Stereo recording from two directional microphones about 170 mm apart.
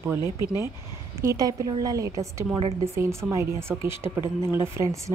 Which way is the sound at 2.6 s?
35° right (ahead or behind).